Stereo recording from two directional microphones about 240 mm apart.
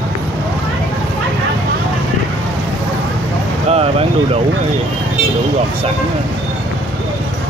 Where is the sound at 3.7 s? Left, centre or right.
Right.